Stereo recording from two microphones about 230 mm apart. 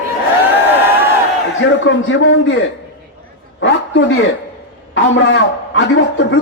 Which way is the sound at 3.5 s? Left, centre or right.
Left.